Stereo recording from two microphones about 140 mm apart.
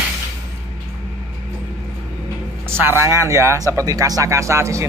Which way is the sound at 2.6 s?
15° right (ahead or behind).